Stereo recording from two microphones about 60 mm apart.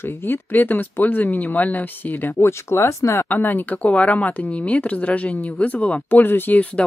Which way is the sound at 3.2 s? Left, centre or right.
Left.